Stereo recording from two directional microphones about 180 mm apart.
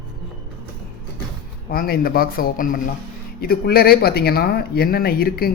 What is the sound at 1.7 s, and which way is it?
Speech, 55° left (ahead or behind).